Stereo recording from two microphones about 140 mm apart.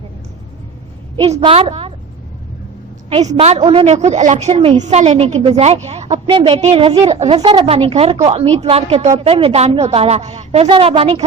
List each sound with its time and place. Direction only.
1.1 s a woman's voice: 40° right (ahead or behind)
3.4 s a woman's voice: 50° right (ahead or behind)